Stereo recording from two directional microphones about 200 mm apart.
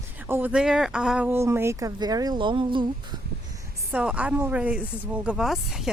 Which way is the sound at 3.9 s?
5° right (ahead or behind).